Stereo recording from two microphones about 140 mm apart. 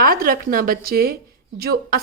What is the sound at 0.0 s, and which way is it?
Speech, 90° right.